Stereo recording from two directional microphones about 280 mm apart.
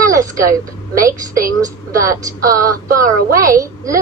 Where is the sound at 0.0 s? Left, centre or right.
Centre.